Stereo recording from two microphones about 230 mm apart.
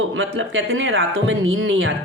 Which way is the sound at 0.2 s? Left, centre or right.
Right.